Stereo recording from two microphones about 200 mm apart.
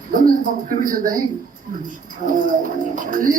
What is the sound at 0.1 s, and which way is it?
A man's voice, 45° right (ahead or behind).